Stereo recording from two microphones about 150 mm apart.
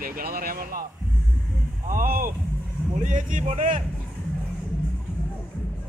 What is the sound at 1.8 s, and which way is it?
Speech, 65° right (ahead or behind).